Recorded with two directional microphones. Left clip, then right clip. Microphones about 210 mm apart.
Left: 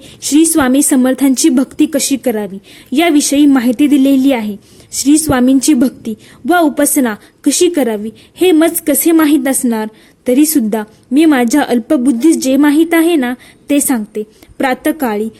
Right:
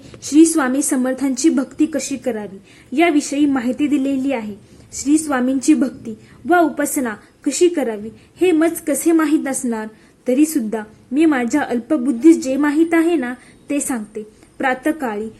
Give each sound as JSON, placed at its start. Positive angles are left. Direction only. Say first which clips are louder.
{"t": 0.2, "sound": "a woman's voice", "louder": "left 3 dB", "side_deg": 40}